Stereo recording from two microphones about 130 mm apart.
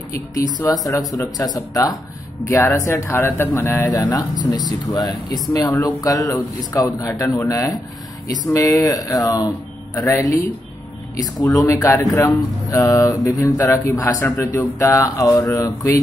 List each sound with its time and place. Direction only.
0.6 s speech: 25° left (ahead or behind)
11.4 s speech: 20° left (ahead or behind)